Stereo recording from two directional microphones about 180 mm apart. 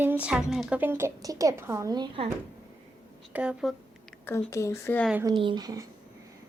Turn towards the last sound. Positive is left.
turn(degrees=-20)  # may be behind; listen again after turning